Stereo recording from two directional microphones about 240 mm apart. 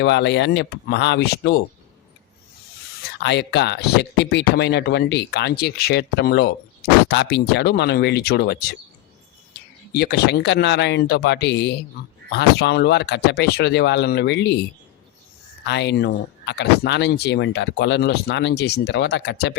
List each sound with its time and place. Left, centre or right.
0.0 s speech: left
3.2 s speech: left
9.9 s speech: left
15.6 s speech: left